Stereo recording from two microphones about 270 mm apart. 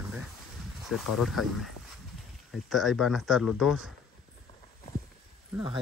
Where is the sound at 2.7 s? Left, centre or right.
Centre.